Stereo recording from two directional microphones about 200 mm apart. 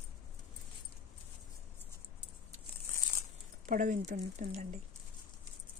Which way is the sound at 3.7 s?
40° right (ahead or behind).